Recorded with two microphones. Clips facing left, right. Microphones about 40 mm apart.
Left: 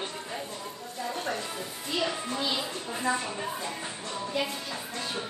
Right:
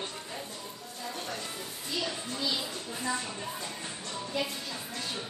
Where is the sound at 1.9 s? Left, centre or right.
Left.